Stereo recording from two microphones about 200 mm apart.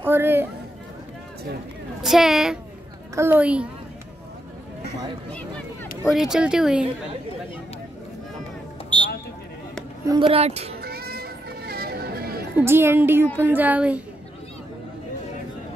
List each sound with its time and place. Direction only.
0.0 s speech: 10° right (ahead or behind)
2.0 s a woman's voice: centre (ahead or behind)
6.0 s speech: centre (ahead or behind)
10.0 s speech: 25° right (ahead or behind)
10.8 s music: 50° right (ahead or behind)
12.5 s a woman's voice: 10° right (ahead or behind)